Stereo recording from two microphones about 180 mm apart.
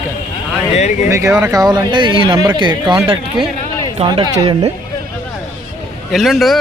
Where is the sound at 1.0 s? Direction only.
15° right (ahead or behind).